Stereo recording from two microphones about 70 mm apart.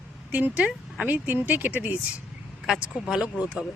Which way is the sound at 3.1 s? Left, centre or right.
Centre.